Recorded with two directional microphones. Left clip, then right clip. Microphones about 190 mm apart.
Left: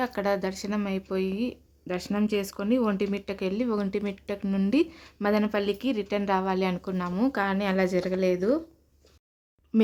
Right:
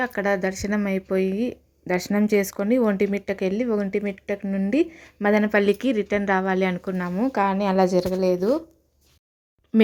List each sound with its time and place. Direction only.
0.0 s speech: 10° right (ahead or behind)
4.4 s speech: 5° left (ahead or behind)
4.7 s speech: 5° right (ahead or behind)
7.3 s speech: 10° right (ahead or behind)